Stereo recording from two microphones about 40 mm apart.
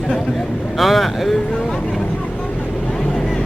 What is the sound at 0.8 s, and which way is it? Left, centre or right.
Speech, centre.